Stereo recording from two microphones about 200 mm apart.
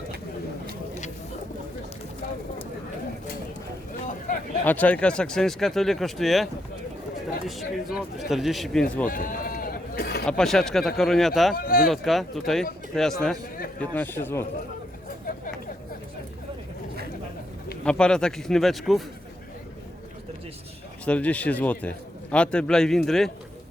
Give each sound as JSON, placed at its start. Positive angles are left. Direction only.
{"t": 4.6, "sound": "a man's voice", "side_deg": 10}
{"t": 9.0, "sound": "sheep", "side_deg": 45}
{"t": 10.2, "sound": "a man's voice", "side_deg": 5}
{"t": 11.5, "sound": "speech", "side_deg": 45}
{"t": 11.9, "sound": "a man's voice", "side_deg": 0}
{"t": 17.8, "sound": "a man's voice", "side_deg": 5}
{"t": 21.0, "sound": "a man's voice", "side_deg": 5}